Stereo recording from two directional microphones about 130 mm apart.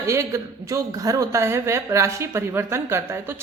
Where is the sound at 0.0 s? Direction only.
20° right (ahead or behind).